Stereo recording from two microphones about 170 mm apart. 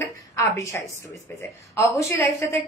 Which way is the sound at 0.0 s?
15° left (ahead or behind).